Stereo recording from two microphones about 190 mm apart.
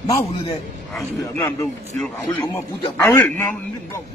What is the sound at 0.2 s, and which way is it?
Speech, 30° left (ahead or behind).